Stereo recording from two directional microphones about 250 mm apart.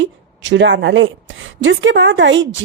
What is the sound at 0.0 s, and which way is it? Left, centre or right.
A woman's voice, right.